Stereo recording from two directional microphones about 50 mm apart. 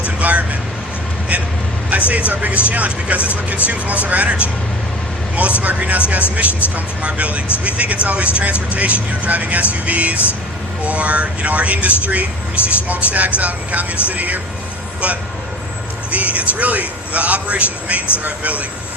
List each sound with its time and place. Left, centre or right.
0.0 s vehicle: right
1.9 s a man's voice: right